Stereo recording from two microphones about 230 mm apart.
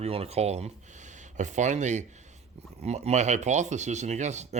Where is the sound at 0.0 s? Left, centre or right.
Right.